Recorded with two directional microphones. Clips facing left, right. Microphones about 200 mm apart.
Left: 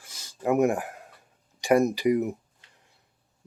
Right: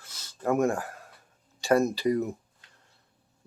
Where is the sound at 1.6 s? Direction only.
15° left (ahead or behind).